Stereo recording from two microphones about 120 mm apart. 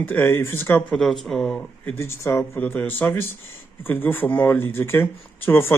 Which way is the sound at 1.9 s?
20° left (ahead or behind).